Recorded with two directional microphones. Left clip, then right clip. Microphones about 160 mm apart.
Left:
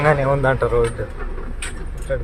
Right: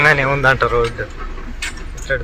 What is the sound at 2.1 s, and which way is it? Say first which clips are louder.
Speech: right 4 dB; centre (ahead or behind).